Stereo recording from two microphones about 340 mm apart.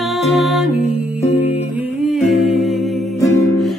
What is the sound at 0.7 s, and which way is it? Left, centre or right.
Music, centre.